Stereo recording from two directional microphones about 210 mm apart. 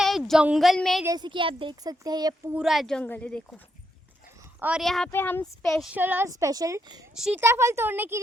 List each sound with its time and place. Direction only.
0.0 s a woman's voice: centre (ahead or behind)
1.0 s speech: 20° right (ahead or behind)
2.6 s speech: centre (ahead or behind)
4.6 s a woman's voice: centre (ahead or behind)
7.1 s a woman's voice: 5° right (ahead or behind)